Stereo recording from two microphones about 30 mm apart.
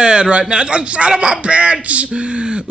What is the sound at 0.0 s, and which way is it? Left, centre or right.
A man's voice, right.